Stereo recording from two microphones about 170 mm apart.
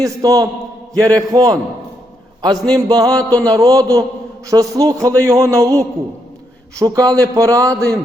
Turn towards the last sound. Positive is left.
turn(degrees=-20)  # may be behind; listen again after turning